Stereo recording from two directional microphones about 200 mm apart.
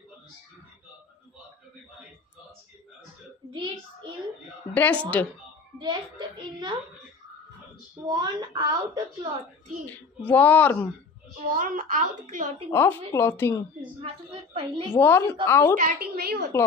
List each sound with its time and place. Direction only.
4.7 s a woman's voice: 5° left (ahead or behind)
5.8 s a sound: 25° right (ahead or behind)
8.1 s a woman's voice: 20° right (ahead or behind)
9.8 s a woman's voice: 10° left (ahead or behind)
11.5 s a woman's voice: 45° right (ahead or behind)
12.7 s a woman's voice: 10° left (ahead or behind)
13.7 s a woman's voice: 25° right (ahead or behind)
15.0 s a woman's voice: 10° left (ahead or behind)
15.8 s a woman's voice: 50° right (ahead or behind)